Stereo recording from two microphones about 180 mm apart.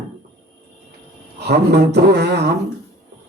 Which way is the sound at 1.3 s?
65° right (ahead or behind).